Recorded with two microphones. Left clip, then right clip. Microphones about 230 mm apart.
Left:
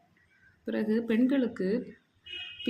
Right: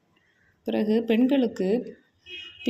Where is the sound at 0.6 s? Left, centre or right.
Centre.